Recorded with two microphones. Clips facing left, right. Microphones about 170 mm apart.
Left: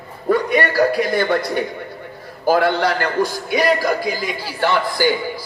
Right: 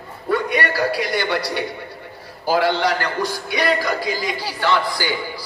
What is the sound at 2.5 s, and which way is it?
A man's voice, 50° left (ahead or behind).